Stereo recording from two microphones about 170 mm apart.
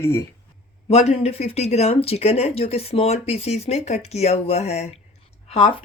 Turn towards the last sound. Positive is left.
turn(degrees=35)  # may be behind; listen again after turning